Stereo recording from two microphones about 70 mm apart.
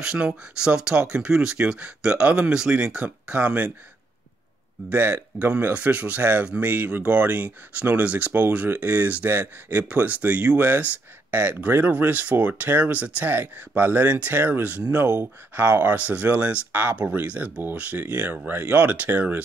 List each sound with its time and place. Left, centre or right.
0.0 s speech: centre
4.8 s speech: right